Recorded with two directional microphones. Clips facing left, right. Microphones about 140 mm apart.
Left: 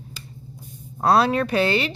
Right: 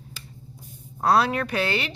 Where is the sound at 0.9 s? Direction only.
30° left (ahead or behind).